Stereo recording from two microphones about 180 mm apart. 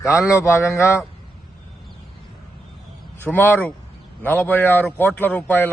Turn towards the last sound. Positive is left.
turn(degrees=10)  # may be behind; listen again after turning